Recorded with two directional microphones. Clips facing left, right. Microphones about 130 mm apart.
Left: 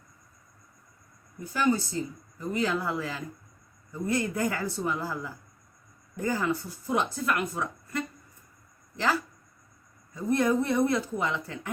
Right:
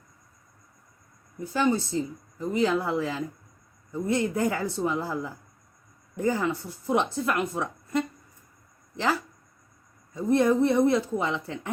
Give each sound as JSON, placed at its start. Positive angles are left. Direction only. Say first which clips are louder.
{"t": 1.5, "sound": "a woman's voice", "louder": "right 2 dB", "side_deg": -25}
{"t": 10.2, "sound": "a woman's voice", "louder": "right 4 dB", "side_deg": -25}